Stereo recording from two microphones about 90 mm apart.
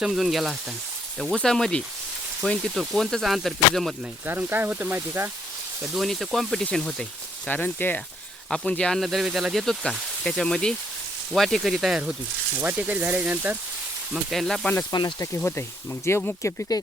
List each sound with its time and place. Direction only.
0.0 s speech: 5° right (ahead or behind)
4.3 s speech: 20° right (ahead or behind)
5.8 s speech: centre (ahead or behind); by 8.0 s 20° left (ahead or behind)
8.4 s speech: 5° left (ahead or behind); by 13.6 s 20° right (ahead or behind)
14.1 s speech: centre (ahead or behind)
14.9 s speech: 60° left (ahead or behind)
15.4 s speech: 25° left (ahead or behind)